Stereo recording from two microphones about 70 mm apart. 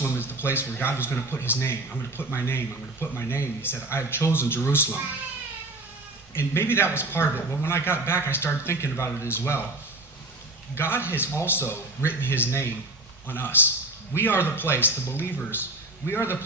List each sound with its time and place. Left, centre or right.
0.0 s a man's voice: left
6.3 s a man's voice: left
10.8 s a man's voice: left